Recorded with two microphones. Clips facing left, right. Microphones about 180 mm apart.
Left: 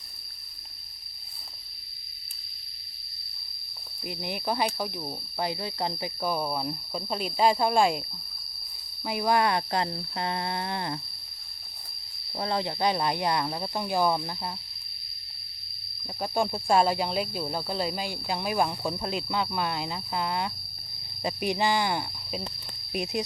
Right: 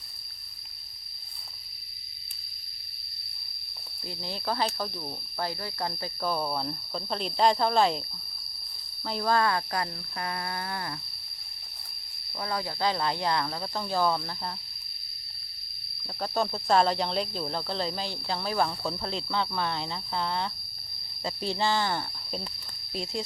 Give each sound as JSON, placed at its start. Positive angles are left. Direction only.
{"t": 4.0, "sound": "speech", "side_deg": 15}
{"t": 9.0, "sound": "speech", "side_deg": 15}
{"t": 12.4, "sound": "speech", "side_deg": 25}
{"t": 16.2, "sound": "speech", "side_deg": 10}